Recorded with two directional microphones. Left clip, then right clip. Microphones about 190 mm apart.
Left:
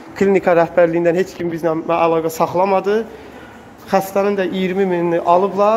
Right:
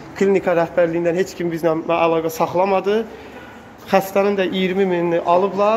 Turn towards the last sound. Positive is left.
turn(degrees=15)  # may be behind; listen again after turning